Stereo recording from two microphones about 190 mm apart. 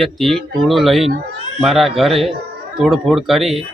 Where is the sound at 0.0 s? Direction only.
Centre (ahead or behind).